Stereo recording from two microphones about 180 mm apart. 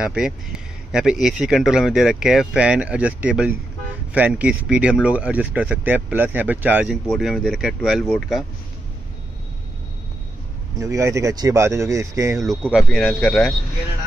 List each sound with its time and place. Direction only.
0.0 s speech: 5° right (ahead or behind)
10.8 s speech: 15° right (ahead or behind)
12.6 s speech: centre (ahead or behind)